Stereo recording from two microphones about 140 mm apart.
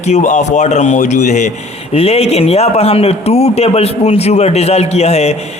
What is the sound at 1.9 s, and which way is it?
A man's voice, 45° left (ahead or behind).